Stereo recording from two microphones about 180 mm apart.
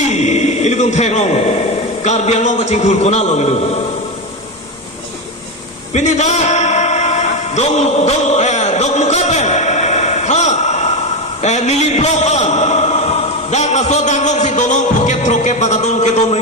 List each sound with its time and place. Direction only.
0.1 s a man's voice: 40° left (ahead or behind)
5.9 s a sound: 40° left (ahead or behind)
11.3 s a man's voice: 40° left (ahead or behind)